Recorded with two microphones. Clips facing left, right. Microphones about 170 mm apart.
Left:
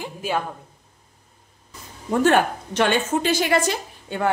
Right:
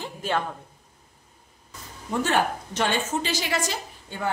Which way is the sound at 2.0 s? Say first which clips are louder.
Left 6 dB; 60° left (ahead or behind).